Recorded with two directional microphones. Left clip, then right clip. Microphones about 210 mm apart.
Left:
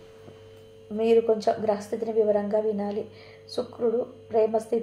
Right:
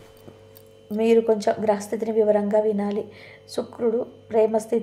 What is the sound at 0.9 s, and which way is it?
A woman's voice, 30° right (ahead or behind).